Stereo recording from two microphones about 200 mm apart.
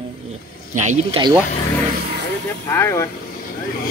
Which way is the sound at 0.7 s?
35° right (ahead or behind).